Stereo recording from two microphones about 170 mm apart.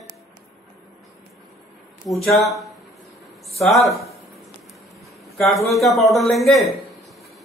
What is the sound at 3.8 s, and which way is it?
Speech, 20° left (ahead or behind).